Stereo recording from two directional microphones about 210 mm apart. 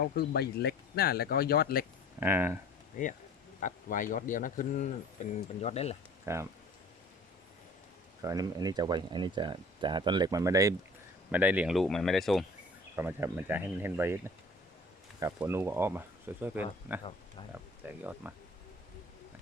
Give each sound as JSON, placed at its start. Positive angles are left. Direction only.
{"t": 0.0, "sound": "speech", "side_deg": 50}
{"t": 2.2, "sound": "speech", "side_deg": -10}
{"t": 3.0, "sound": "speech", "side_deg": 40}
{"t": 6.2, "sound": "speech", "side_deg": -15}
{"t": 8.2, "sound": "speech", "side_deg": -15}
{"t": 13.0, "sound": "speech", "side_deg": -10}
{"t": 15.2, "sound": "speech", "side_deg": -10}
{"t": 17.0, "sound": "speech", "side_deg": 25}
{"t": 17.5, "sound": "speech", "side_deg": -10}